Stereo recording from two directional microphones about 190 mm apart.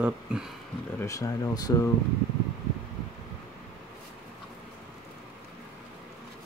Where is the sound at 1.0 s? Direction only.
15° left (ahead or behind).